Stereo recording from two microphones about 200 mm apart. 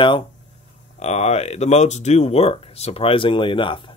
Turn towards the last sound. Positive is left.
turn(degrees=25)  # may be behind; listen again after turning